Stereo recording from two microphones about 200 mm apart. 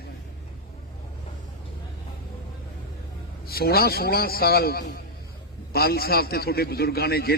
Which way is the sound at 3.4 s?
50° left (ahead or behind).